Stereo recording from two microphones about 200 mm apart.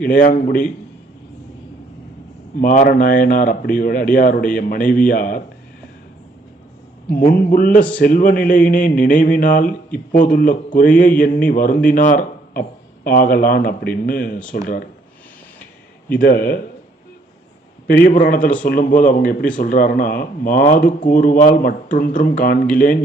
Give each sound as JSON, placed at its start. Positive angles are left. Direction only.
{"t": 0.0, "sound": "speech", "side_deg": 45}
{"t": 2.6, "sound": "speech", "side_deg": 45}
{"t": 7.3, "sound": "speech", "side_deg": 45}
{"t": 16.2, "sound": "speech", "side_deg": 45}
{"t": 17.8, "sound": "speech", "side_deg": 45}